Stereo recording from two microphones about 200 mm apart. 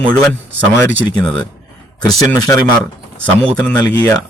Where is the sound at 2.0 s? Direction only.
20° left (ahead or behind).